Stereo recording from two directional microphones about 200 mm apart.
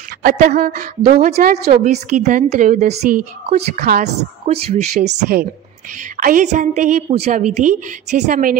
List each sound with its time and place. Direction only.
0.2 s speech: 50° right (ahead or behind)
1.7 s a woman's voice: 35° right (ahead or behind)